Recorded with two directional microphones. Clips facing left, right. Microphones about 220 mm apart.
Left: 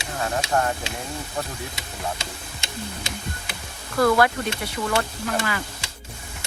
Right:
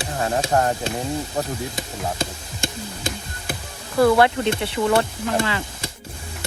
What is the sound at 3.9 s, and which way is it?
Speech, 25° right (ahead or behind).